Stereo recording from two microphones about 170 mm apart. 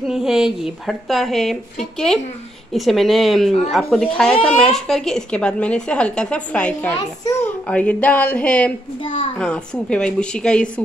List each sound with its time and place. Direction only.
0.0 s speech: centre (ahead or behind)
2.7 s a woman's voice: centre (ahead or behind)
9.0 s a child's voice: 30° left (ahead or behind)
9.4 s speech: 5° left (ahead or behind)